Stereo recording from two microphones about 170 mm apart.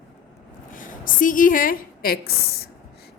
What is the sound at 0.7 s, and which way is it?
A woman's voice, 50° left (ahead or behind).